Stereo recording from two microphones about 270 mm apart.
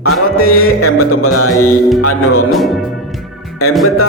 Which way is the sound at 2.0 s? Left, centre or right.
Left.